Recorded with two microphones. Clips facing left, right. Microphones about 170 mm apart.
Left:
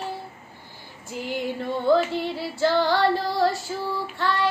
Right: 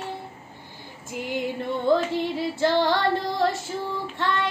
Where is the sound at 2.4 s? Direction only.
20° right (ahead or behind).